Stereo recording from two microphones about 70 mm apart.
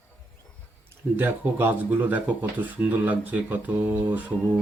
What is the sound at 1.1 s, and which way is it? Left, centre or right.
Speech, right.